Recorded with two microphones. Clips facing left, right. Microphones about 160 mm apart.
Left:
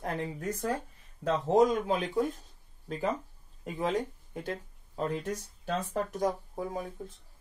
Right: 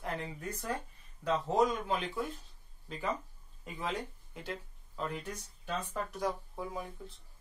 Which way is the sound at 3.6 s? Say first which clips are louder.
Left 7 dB; 45° left (ahead or behind).